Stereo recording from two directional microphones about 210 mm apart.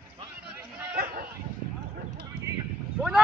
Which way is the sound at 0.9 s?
45° right (ahead or behind).